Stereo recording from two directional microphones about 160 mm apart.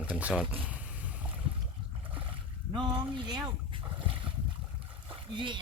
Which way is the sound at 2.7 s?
30° right (ahead or behind).